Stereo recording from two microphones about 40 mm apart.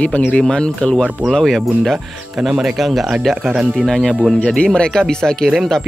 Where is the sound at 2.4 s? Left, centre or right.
Centre.